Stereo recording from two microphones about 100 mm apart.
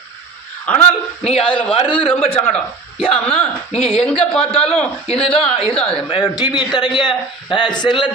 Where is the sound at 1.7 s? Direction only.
65° left (ahead or behind).